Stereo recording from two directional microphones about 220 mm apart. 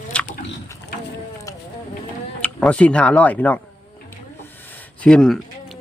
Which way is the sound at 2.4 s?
5° left (ahead or behind).